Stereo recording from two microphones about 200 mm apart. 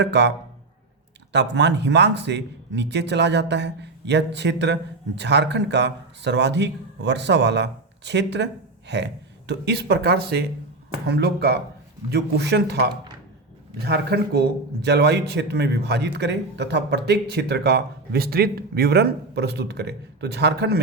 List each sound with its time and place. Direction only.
0.0 s speech: 60° right (ahead or behind)